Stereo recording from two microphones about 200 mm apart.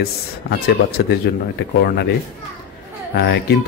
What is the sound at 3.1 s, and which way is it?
Speech, 60° left (ahead or behind).